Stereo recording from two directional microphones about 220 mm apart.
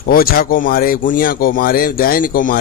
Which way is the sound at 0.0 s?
40° left (ahead or behind).